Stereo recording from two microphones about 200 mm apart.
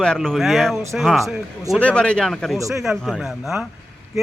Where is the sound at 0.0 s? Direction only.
5° left (ahead or behind).